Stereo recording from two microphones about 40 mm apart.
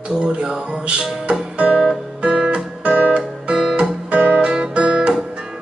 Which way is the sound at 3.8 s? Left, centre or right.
Right.